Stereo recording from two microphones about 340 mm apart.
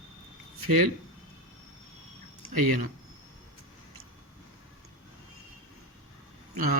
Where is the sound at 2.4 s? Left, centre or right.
Right.